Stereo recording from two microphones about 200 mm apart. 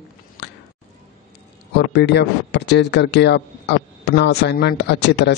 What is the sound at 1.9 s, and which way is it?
Speech, 55° left (ahead or behind).